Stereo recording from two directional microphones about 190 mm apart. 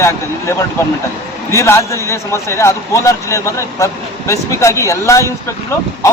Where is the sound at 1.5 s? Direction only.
15° left (ahead or behind).